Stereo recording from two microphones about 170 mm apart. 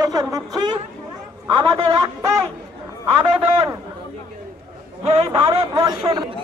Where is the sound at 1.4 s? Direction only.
30° right (ahead or behind).